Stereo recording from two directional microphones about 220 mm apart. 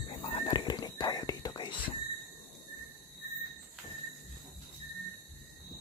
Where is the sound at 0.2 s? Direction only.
20° left (ahead or behind).